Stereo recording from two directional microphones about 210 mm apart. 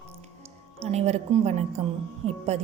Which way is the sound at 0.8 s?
30° right (ahead or behind).